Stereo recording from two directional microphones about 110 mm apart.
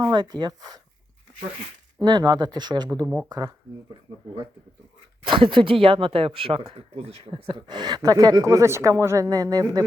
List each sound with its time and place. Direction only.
0.0 s speech: 40° right (ahead or behind)
2.0 s speech: 40° right (ahead or behind)
5.2 s speech: 50° right (ahead or behind); by 7.3 s 70° right (ahead or behind)
7.3 s speech: 50° right (ahead or behind); by 9.8 s 35° right (ahead or behind)